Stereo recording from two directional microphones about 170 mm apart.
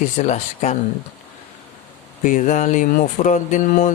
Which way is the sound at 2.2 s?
50° left (ahead or behind).